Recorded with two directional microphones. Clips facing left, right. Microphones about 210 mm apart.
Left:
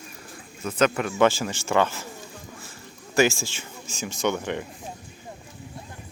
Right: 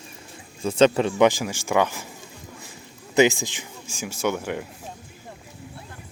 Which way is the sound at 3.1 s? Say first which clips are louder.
Right 3 dB; 20° right (ahead or behind).